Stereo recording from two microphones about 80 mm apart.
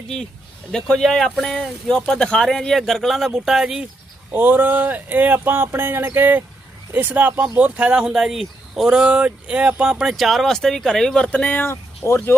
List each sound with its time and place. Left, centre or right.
0.7 s speech: centre
4.3 s speech: right; by 12.4 s left